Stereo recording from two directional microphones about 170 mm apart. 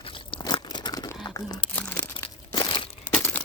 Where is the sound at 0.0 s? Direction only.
30° left (ahead or behind).